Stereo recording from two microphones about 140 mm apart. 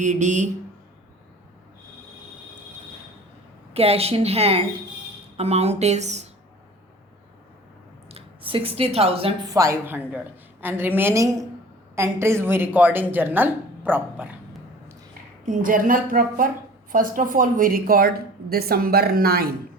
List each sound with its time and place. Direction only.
0.0 s speech: 60° right (ahead or behind)
3.8 s speech: 45° right (ahead or behind)
8.1 s speech: 40° right (ahead or behind)
9.5 s speech: 20° right (ahead or behind)
15.4 s a woman's voice: 70° right (ahead or behind); by 19.5 s 90° right